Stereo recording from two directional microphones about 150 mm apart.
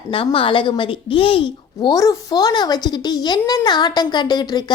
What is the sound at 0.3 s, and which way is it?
A woman's voice, 35° left (ahead or behind).